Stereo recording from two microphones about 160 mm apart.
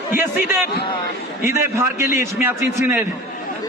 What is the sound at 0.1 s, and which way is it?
A man's voice, 15° right (ahead or behind).